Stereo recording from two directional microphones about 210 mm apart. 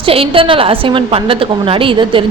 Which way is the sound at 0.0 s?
25° right (ahead or behind).